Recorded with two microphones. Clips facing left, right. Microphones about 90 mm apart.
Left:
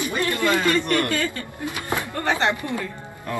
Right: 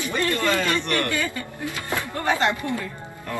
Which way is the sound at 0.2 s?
20° left (ahead or behind).